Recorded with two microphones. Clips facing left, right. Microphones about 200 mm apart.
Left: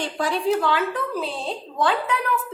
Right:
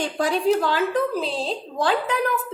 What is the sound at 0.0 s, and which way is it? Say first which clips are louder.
A woman's voice: right 2 dB; 45° right (ahead or behind).